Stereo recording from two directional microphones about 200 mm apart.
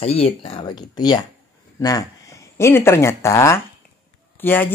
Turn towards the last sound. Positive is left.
turn(degrees=10)  # may be behind; listen again after turning